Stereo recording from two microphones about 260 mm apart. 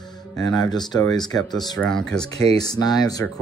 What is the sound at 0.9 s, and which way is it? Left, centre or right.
Speech, centre.